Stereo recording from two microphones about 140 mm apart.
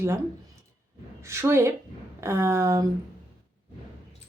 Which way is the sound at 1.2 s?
20° right (ahead or behind).